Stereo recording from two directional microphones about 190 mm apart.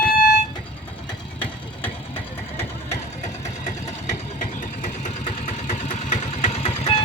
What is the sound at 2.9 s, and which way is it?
Engine, 35° left (ahead or behind).